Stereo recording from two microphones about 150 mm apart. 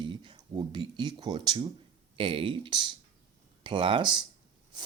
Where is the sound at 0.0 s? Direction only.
35° right (ahead or behind).